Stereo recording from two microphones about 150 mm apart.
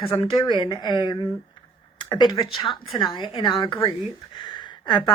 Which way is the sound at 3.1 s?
35° left (ahead or behind).